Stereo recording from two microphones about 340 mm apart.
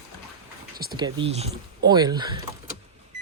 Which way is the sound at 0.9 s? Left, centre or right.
Centre.